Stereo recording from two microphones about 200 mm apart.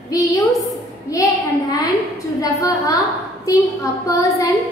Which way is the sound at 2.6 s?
15° left (ahead or behind).